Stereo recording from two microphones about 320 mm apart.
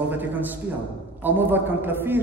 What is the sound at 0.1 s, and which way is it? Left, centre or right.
A man's voice, centre.